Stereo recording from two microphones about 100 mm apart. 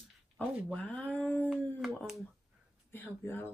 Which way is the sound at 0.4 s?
15° right (ahead or behind).